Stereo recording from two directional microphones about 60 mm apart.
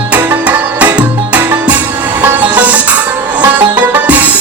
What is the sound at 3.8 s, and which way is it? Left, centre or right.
Music, right.